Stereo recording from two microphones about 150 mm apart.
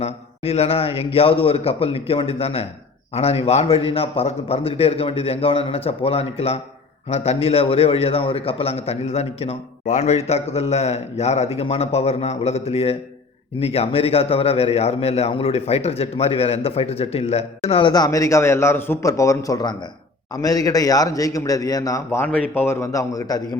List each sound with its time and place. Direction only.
0.0 s a man's voice: 45° left (ahead or behind); by 23.4 s 20° left (ahead or behind)